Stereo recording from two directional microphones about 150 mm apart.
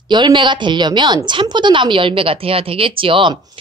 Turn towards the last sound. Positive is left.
turn(degrees=-35)  # may be behind; listen again after turning